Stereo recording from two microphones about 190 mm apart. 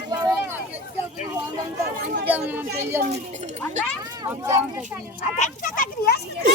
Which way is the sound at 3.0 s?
40° right (ahead or behind).